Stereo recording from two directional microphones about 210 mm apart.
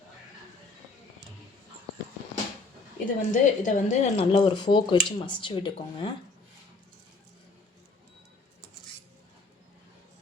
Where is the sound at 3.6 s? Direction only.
35° left (ahead or behind).